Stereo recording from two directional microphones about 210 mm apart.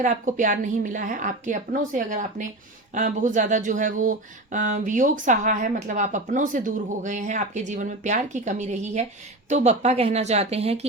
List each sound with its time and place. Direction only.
0.0 s speech: 40° right (ahead or behind)